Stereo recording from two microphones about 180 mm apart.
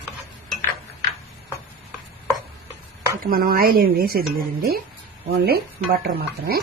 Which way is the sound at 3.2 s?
55° right (ahead or behind).